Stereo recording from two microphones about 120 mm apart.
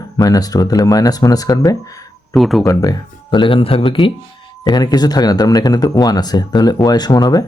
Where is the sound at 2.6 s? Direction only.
30° left (ahead or behind); by 4.0 s 50° left (ahead or behind).